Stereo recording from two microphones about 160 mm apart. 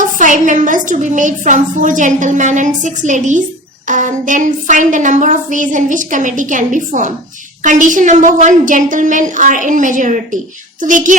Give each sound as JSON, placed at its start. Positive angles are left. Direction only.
{"t": 0.0, "sound": "a woman's voice", "side_deg": -50}